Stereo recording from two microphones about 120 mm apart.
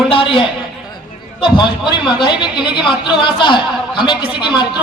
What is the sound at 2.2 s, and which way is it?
Speech, 40° left (ahead or behind).